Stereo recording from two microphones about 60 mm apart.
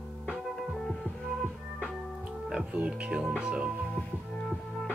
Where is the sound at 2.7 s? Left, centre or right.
Centre.